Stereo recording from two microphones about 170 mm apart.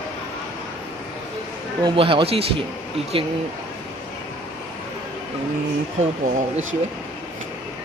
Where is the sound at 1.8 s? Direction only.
30° right (ahead or behind).